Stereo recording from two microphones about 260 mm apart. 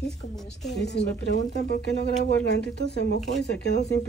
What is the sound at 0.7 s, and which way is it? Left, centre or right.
Speech, left.